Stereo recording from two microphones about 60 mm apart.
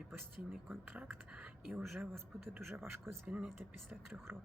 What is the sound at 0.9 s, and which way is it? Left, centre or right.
Speech, right.